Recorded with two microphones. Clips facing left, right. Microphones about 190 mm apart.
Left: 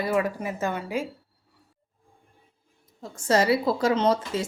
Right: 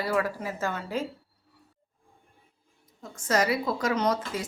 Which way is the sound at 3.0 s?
30° left (ahead or behind).